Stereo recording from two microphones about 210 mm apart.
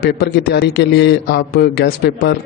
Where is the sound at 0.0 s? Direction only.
50° left (ahead or behind).